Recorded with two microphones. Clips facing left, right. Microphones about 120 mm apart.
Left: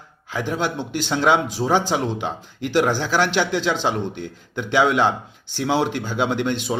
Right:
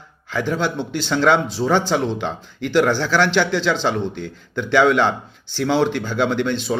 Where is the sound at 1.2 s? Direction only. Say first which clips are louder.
Right 2 dB; 10° left (ahead or behind).